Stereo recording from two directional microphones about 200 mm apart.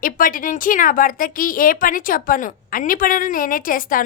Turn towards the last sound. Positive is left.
turn(degrees=45)  # may be behind; listen again after turning